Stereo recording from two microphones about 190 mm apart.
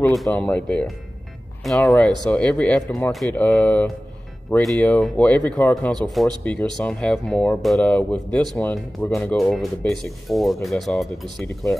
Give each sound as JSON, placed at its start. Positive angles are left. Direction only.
{"t": 0.1, "sound": "speech", "side_deg": 5}